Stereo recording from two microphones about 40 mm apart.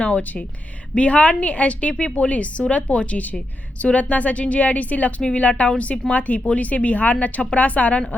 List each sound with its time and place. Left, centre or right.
0.0 s a woman's voice: left
6.1 s a woman's voice: left